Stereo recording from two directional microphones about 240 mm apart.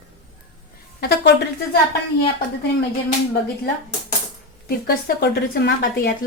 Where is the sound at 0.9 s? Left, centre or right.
Left.